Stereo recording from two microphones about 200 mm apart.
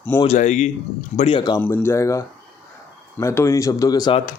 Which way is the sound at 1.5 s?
10° left (ahead or behind).